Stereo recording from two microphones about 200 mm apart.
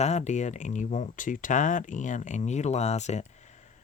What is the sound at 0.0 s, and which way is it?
Speech, 35° left (ahead or behind).